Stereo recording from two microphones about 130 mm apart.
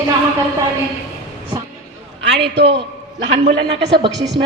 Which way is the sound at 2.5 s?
40° right (ahead or behind).